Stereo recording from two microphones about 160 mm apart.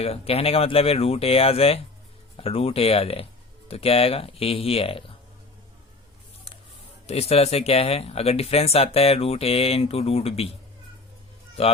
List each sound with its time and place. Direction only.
0.0 s speech: 40° left (ahead or behind)
7.1 s speech: 40° left (ahead or behind)
11.6 s speech: 40° left (ahead or behind)